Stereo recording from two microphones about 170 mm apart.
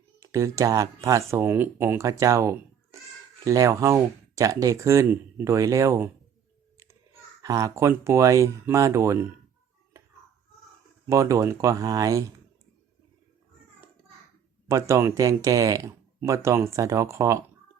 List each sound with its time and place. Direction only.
0.2 s speech: 20° right (ahead or behind)
7.4 s speech: 20° right (ahead or behind)
11.1 s speech: 15° right (ahead or behind)
14.7 s speech: 15° right (ahead or behind)